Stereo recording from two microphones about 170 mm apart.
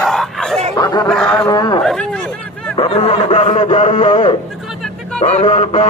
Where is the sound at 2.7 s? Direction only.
35° left (ahead or behind).